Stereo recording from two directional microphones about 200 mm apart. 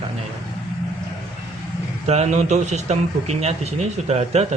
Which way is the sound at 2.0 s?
35° right (ahead or behind).